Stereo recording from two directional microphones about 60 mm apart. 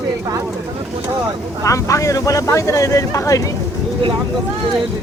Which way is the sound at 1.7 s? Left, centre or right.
Left.